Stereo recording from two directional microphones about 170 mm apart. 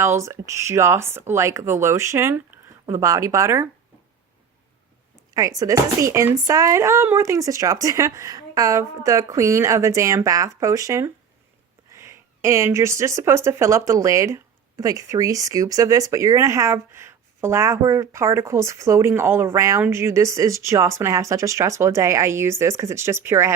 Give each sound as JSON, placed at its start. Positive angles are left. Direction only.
{"t": 0.0, "sound": "speech", "side_deg": -15}
{"t": 5.3, "sound": "speech", "side_deg": -20}